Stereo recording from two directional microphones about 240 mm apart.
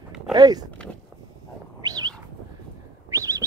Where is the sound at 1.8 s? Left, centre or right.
Centre.